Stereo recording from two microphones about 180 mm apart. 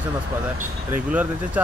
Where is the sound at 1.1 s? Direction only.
10° right (ahead or behind).